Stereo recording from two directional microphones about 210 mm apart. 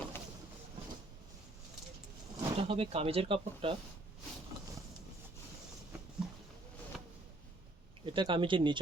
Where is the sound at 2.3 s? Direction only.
25° right (ahead or behind).